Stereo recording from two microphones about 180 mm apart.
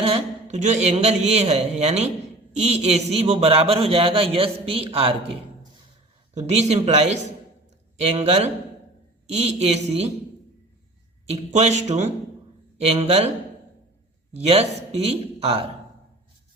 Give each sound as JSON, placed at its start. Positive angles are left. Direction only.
{"t": 0.0, "sound": "a man's voice", "side_deg": -35}
{"t": 6.3, "sound": "a man's voice", "side_deg": -35}
{"t": 11.5, "sound": "a man's voice", "side_deg": -40}
{"t": 14.3, "sound": "a man's voice", "side_deg": -35}